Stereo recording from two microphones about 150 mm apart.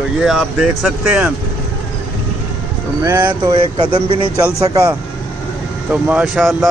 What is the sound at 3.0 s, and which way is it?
Speech, 15° right (ahead or behind).